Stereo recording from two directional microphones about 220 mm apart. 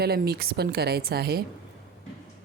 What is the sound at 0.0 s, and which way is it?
Speech, 45° right (ahead or behind).